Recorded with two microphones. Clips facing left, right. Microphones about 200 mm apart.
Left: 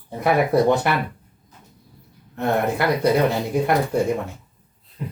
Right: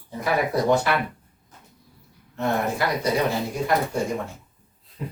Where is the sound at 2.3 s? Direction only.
60° left (ahead or behind).